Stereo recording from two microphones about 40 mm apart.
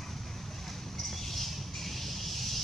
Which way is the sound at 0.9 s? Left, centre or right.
Centre.